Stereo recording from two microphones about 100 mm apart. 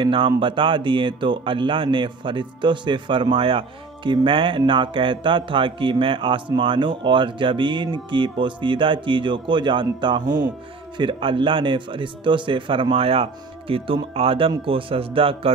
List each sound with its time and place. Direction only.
0.0 s music: 60° right (ahead or behind)
0.4 s speech: 55° right (ahead or behind)
11.0 s speech: 60° right (ahead or behind)